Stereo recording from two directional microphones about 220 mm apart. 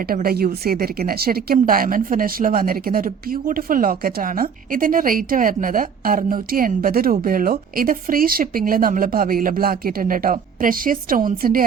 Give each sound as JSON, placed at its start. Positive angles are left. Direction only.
{"t": 0.1, "sound": "a woman's voice", "side_deg": -40}